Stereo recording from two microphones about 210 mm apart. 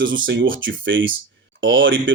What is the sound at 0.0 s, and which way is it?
Speech, 65° right (ahead or behind).